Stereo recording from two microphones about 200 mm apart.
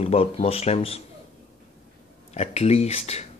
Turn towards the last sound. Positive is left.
turn(degrees=30)  # may be behind; listen again after turning